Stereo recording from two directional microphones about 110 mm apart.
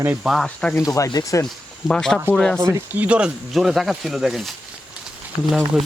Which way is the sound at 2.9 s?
10° right (ahead or behind).